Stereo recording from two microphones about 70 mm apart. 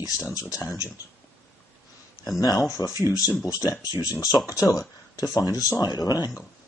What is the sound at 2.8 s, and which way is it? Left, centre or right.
Speech, left.